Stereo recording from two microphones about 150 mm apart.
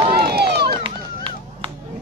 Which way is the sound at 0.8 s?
35° right (ahead or behind).